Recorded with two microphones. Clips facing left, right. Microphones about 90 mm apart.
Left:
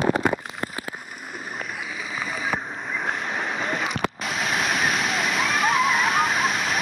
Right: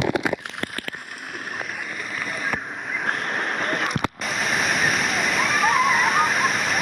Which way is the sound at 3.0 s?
Centre (ahead or behind).